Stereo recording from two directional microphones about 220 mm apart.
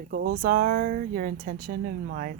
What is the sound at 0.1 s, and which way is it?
Speech, 40° right (ahead or behind).